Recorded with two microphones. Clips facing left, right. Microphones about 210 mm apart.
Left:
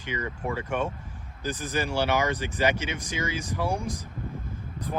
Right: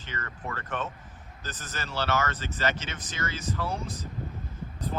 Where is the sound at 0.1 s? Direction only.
10° left (ahead or behind).